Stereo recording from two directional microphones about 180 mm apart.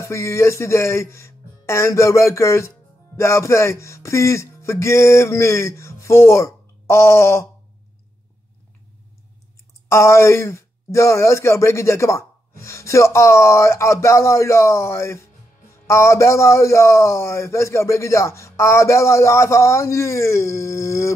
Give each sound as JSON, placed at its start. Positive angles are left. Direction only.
{"t": 0.0, "sound": "speech", "side_deg": 15}
{"t": 9.8, "sound": "speech", "side_deg": 15}